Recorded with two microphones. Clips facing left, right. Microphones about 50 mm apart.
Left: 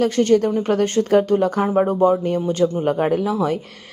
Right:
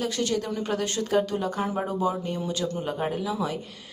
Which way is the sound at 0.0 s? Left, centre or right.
Left.